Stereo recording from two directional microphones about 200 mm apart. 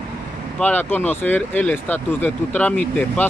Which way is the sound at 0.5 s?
10° left (ahead or behind).